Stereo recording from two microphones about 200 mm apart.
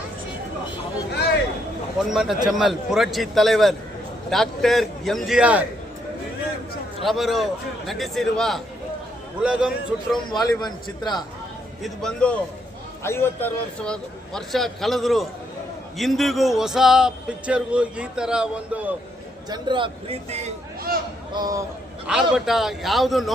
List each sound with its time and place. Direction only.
2.0 s speech: centre (ahead or behind)
7.0 s speech: centre (ahead or behind)
10.4 s a man's voice: 20° left (ahead or behind)
11.8 s speech: 5° left (ahead or behind)
19.5 s a man's voice: 25° right (ahead or behind)
21.3 s a man's voice: 20° right (ahead or behind)
22.0 s speech: 5° right (ahead or behind)